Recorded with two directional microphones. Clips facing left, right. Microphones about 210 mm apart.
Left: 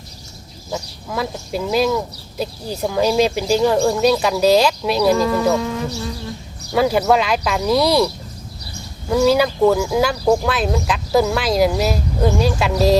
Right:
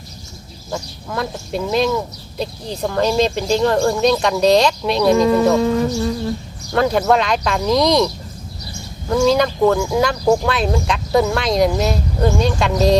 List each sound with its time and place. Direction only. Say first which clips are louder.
0.7 s speech: even; 5° left (ahead or behind)
5.1 s speech: right 4 dB; 25° right (ahead or behind)
6.7 s speech: even; 5° left (ahead or behind)